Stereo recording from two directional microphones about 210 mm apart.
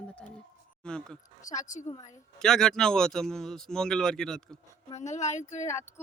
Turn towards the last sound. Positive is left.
turn(degrees=35)  # may be behind; listen again after turning